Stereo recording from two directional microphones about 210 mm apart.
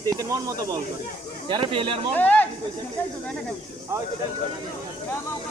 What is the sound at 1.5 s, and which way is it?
Speech, 25° right (ahead or behind).